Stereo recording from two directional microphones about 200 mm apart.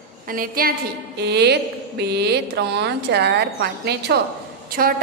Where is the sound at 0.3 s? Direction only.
45° right (ahead or behind).